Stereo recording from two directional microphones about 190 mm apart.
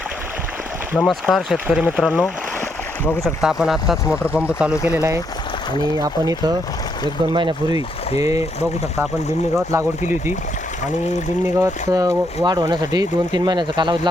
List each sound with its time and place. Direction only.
0.9 s speech: centre (ahead or behind); by 8.4 s 15° right (ahead or behind)
11.4 s speech: 15° right (ahead or behind)